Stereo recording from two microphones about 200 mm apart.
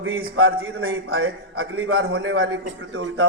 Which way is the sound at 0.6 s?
90° right.